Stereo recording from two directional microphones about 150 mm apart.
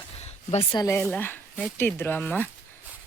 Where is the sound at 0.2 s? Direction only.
45° left (ahead or behind).